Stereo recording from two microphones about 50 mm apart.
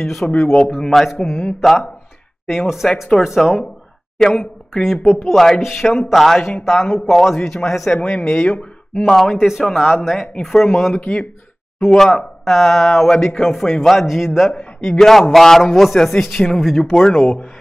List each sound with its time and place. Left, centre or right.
0.0 s a man's voice: centre
0.7 s a man's voice: centre
4.4 s a man's voice: centre
7.9 s a man's voice: left; by 9.3 s centre
9.3 s speech: centre
10.4 s a man's voice: centre
11.0 s speech: left
11.9 s a man's voice: centre
12.4 s a man's voice: centre
14.5 s a man's voice: centre
17.1 s speech: centre